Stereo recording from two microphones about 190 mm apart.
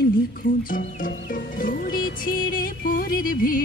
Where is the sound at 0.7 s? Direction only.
45° left (ahead or behind).